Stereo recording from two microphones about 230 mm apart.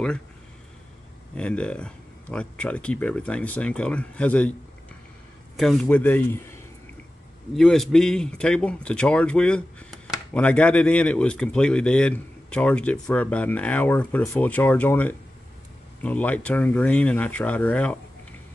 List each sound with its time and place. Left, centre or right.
1.3 s a man's voice: centre
5.6 s speech: centre
7.5 s a man's voice: centre